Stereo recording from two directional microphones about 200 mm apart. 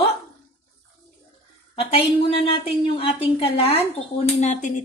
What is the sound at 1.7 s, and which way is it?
A woman's voice, 30° left (ahead or behind).